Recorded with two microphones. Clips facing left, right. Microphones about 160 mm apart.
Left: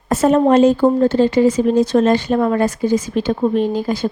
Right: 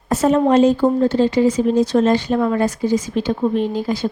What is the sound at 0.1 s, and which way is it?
Speech, 50° left (ahead or behind).